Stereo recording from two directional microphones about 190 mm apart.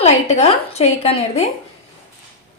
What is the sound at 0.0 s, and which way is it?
A woman's voice, 35° left (ahead or behind).